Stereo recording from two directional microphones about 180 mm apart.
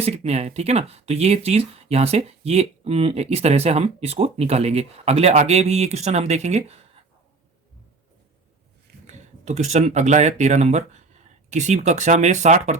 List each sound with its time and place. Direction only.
0.0 s speech: 35° right (ahead or behind)
9.0 s speech: 40° right (ahead or behind)